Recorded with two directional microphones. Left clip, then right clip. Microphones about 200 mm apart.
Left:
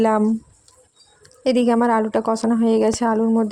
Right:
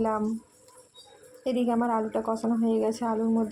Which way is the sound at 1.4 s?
50° left (ahead or behind).